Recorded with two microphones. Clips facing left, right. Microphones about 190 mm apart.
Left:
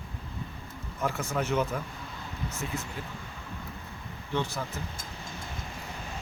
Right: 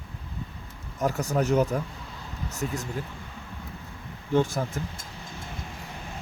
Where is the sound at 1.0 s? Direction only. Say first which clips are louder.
Right 5 dB; 40° right (ahead or behind).